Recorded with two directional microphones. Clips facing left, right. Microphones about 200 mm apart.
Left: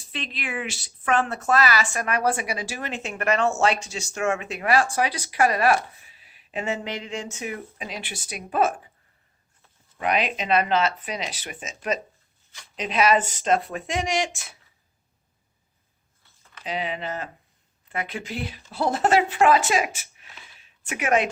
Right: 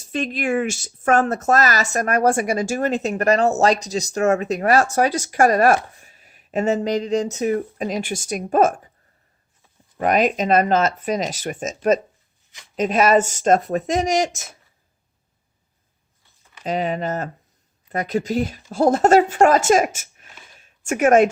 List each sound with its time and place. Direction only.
0.0 s a woman's voice: 45° right (ahead or behind)
10.0 s a woman's voice: 45° right (ahead or behind)
16.6 s a woman's voice: 45° right (ahead or behind)
20.5 s a sound: 45° right (ahead or behind)